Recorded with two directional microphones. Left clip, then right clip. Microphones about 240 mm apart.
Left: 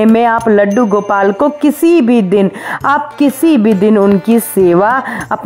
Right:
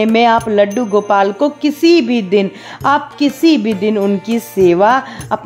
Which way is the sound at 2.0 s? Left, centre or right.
Centre.